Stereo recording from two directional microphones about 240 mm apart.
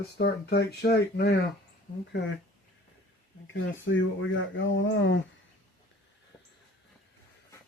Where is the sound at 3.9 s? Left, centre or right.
Left.